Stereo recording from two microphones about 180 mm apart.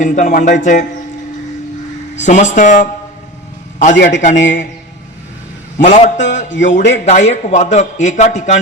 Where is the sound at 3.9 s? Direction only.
80° left.